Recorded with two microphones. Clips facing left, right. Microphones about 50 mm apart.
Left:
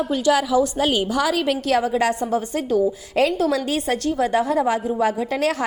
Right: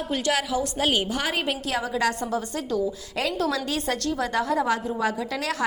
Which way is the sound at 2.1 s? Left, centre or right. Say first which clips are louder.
Left 6 dB; centre.